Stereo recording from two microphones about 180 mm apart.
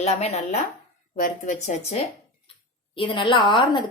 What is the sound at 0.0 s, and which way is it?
Speech, 35° left (ahead or behind).